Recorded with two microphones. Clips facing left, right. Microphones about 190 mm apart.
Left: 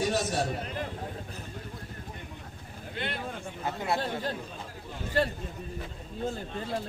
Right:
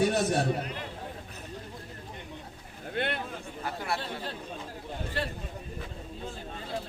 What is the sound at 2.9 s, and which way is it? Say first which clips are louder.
Speech: right 5 dB; 55° right (ahead or behind).